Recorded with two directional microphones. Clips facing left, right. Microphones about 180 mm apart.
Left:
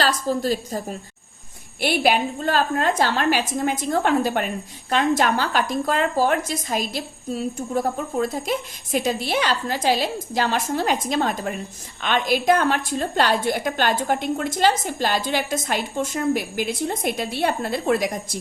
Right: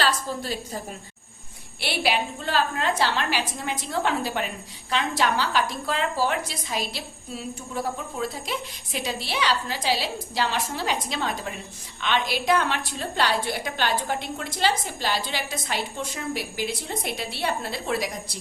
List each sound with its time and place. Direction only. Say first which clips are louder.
0.0 s a woman's voice: left 5 dB; 40° left (ahead or behind)
1.8 s a woman's voice: left 6 dB; 50° left (ahead or behind)